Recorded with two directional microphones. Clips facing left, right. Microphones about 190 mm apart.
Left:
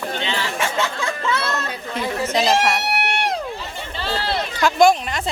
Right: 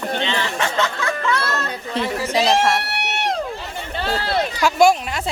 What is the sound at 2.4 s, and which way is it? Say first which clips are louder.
Speech: right 2 dB; centre (ahead or behind).